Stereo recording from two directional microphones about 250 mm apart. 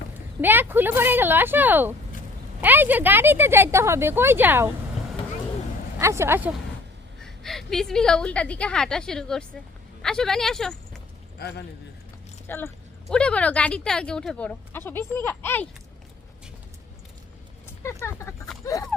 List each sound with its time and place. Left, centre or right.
0.4 s speech: centre
6.0 s speech: centre
7.2 s a woman's voice: centre
11.3 s a man's voice: left
12.5 s a woman's voice: centre
18.0 s speech: centre